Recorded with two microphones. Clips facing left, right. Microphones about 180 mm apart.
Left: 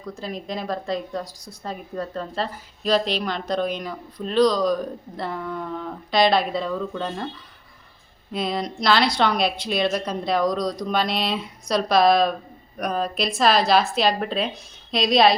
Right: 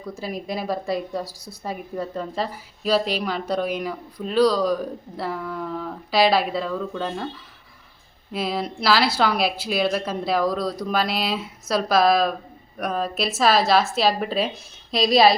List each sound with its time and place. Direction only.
0.0 s a woman's voice: 10° right (ahead or behind)
8.3 s speech: 5° right (ahead or behind)